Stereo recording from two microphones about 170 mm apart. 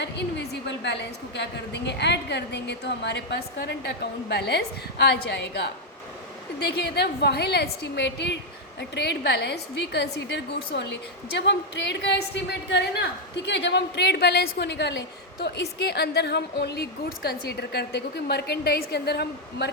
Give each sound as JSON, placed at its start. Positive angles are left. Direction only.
{"t": 0.0, "sound": "a woman's voice", "side_deg": 90}
{"t": 8.8, "sound": "a woman's voice", "side_deg": 80}